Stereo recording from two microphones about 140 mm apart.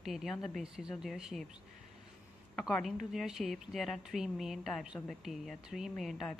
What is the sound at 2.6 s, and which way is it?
Speech, centre (ahead or behind).